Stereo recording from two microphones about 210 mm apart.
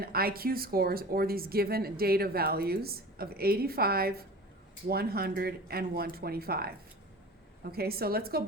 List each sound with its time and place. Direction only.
0.0 s speech: 45° right (ahead or behind)